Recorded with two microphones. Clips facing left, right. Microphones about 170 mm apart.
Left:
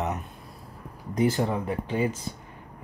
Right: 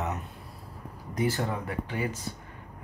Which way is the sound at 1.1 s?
20° left (ahead or behind).